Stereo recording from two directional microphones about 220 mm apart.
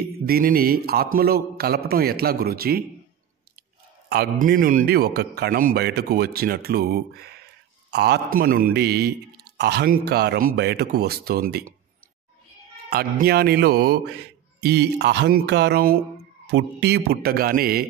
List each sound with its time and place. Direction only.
0.0 s mantra: 45° right (ahead or behind)
1.1 s a man's voice: 45° right (ahead or behind)
4.1 s a man's voice: 45° right (ahead or behind)
12.9 s a man's voice: 45° right (ahead or behind)